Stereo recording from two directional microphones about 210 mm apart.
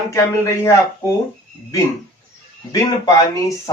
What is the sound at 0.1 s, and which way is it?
Speech, 15° left (ahead or behind).